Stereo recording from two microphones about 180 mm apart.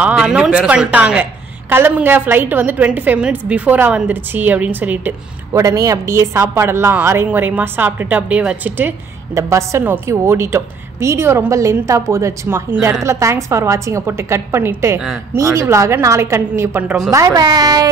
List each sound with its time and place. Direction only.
0.0 s a woman's voice: 5° right (ahead or behind); by 17.8 s 20° right (ahead or behind)